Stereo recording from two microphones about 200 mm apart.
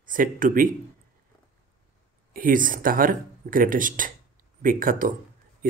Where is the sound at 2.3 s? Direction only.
45° right (ahead or behind).